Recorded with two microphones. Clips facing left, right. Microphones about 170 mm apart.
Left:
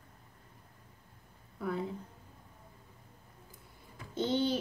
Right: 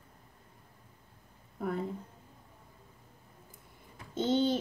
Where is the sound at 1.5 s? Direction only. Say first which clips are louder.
Right 1 dB; 50° right (ahead or behind).